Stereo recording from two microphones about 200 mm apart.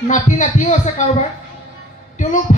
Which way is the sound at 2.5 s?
35° left (ahead or behind).